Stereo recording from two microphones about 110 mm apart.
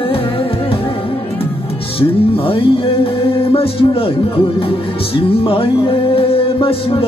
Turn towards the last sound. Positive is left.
turn(degrees=55)  # may be behind; listen again after turning